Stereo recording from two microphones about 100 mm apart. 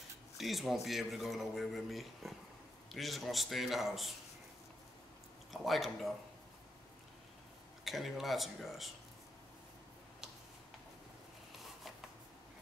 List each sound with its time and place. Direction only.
0.4 s speech: centre (ahead or behind)
5.5 s speech: centre (ahead or behind)
7.8 s speech: centre (ahead or behind)